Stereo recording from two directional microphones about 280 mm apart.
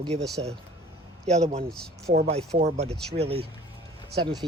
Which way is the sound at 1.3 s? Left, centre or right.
Right.